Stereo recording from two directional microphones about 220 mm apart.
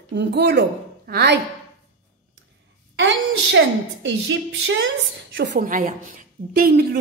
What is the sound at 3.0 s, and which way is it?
A woman's voice, 55° right (ahead or behind).